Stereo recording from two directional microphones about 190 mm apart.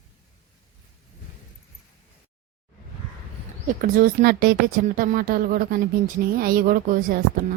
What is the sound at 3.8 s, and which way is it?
Speech, 50° right (ahead or behind).